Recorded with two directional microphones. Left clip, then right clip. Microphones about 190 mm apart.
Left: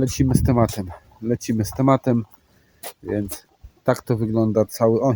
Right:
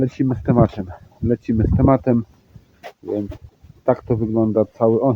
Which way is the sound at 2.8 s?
40° left (ahead or behind).